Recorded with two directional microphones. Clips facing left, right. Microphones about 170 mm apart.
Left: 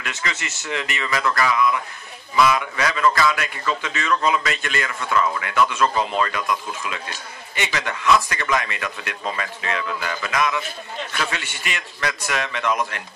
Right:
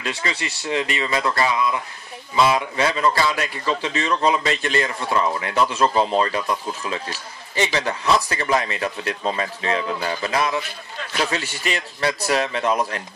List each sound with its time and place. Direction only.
0.0 s a man's voice: 35° right (ahead or behind)